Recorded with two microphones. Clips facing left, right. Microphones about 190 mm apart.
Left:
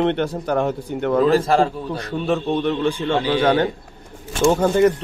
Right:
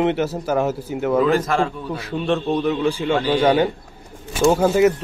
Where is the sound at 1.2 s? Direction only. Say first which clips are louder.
Left 3 dB; 35° left (ahead or behind).